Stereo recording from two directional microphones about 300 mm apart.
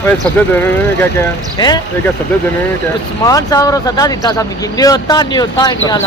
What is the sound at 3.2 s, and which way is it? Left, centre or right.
Speech, centre.